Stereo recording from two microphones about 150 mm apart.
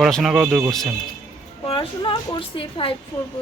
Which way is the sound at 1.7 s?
35° left (ahead or behind).